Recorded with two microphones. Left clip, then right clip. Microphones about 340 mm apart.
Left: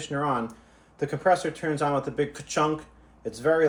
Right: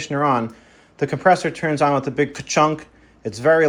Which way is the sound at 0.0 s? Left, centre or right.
Centre.